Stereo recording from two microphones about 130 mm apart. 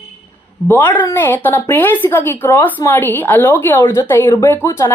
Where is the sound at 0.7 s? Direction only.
15° left (ahead or behind).